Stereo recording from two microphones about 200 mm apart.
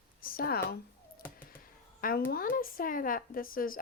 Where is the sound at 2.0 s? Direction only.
45° left (ahead or behind).